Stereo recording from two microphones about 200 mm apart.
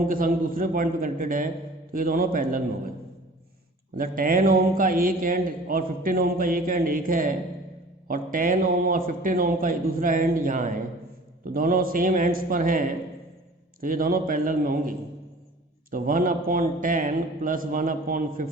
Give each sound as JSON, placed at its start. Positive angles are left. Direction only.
{"t": 0.1, "sound": "a man's voice", "side_deg": -45}
{"t": 3.9, "sound": "a man's voice", "side_deg": -45}